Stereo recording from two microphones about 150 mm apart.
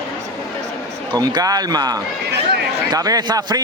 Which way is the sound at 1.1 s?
30° right (ahead or behind).